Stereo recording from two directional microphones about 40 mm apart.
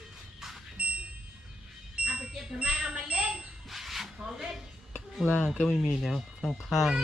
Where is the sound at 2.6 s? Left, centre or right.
Right.